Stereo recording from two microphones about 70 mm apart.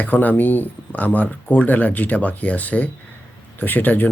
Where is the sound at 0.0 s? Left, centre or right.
Left.